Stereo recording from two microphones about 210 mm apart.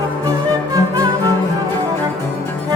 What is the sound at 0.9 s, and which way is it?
Music, 15° right (ahead or behind).